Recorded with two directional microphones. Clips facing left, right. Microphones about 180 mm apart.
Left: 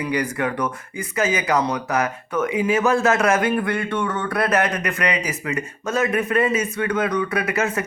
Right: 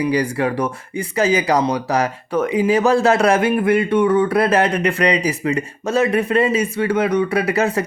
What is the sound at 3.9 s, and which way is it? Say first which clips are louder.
Speech: right 8 dB; 20° right (ahead or behind).